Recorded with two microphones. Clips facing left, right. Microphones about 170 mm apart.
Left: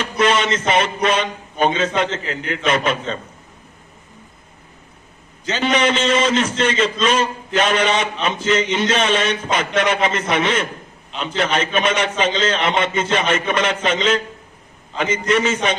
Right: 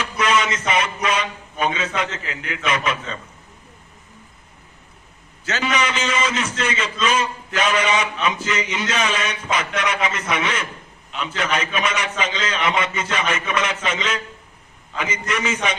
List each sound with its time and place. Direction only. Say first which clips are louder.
0.0 s a man's voice: left 3 dB; 30° left (ahead or behind)
5.5 s a man's voice: left 5 dB; 30° left (ahead or behind)